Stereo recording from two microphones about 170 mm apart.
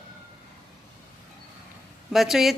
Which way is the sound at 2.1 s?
Centre (ahead or behind).